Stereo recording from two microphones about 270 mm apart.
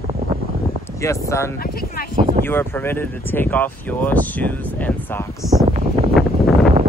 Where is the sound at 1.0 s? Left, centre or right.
Centre.